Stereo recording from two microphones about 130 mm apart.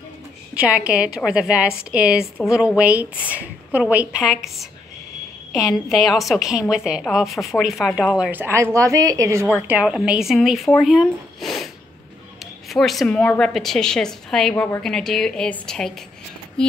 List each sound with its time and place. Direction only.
0.6 s a woman's voice: 10° right (ahead or behind)
9.7 s speech: 10° right (ahead or behind)
14.5 s a woman's voice: 20° left (ahead or behind)
14.8 s speech: 5° left (ahead or behind)